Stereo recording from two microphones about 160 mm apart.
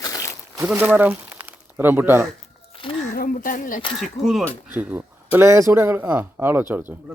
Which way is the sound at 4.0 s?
Centre (ahead or behind).